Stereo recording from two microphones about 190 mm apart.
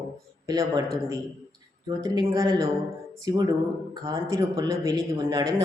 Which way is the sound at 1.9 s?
20° right (ahead or behind).